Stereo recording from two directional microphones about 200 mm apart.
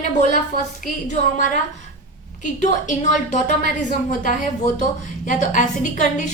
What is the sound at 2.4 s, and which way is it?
A woman's voice, 40° left (ahead or behind).